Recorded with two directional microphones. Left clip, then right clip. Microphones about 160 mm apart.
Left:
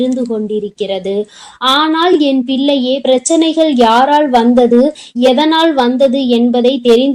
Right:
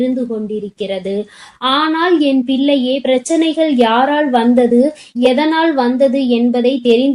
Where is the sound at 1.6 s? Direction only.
35° left (ahead or behind).